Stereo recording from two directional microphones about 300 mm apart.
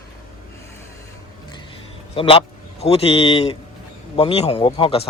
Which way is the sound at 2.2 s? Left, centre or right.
Centre.